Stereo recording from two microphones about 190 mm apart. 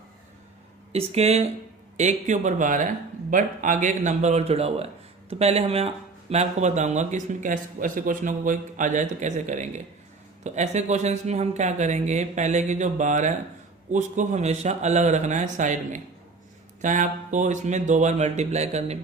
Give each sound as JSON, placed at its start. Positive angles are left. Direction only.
{"t": 0.9, "sound": "speech", "side_deg": -35}